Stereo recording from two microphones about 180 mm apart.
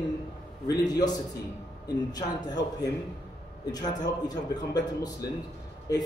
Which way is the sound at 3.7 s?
20° left (ahead or behind).